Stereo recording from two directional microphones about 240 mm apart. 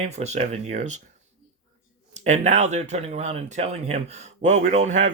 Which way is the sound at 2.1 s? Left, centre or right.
Right.